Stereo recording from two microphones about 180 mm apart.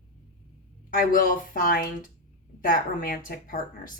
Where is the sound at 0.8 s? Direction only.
50° left (ahead or behind).